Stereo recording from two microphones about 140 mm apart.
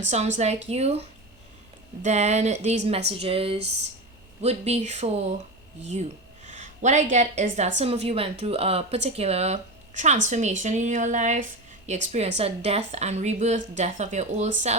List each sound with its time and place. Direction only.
0.1 s a woman's voice: 55° right (ahead or behind)